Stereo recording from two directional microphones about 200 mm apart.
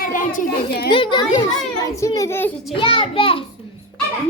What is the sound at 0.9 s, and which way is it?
A child's voice, 25° left (ahead or behind).